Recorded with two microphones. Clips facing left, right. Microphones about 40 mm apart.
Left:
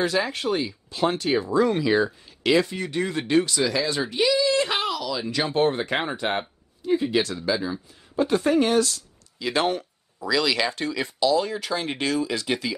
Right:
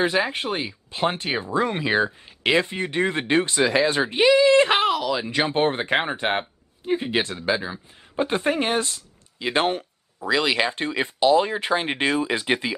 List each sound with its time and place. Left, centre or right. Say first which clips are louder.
0.0 s speech: right 2 dB; right